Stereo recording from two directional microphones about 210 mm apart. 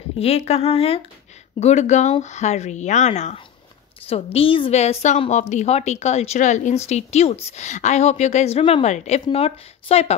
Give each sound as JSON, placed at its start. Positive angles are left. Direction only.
{"t": 0.2, "sound": "a woman's voice", "side_deg": 30}